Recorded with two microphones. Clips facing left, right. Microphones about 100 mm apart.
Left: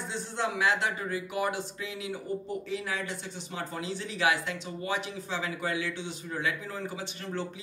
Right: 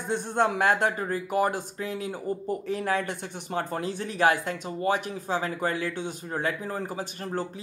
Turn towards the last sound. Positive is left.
turn(degrees=-40)  # may be behind; listen again after turning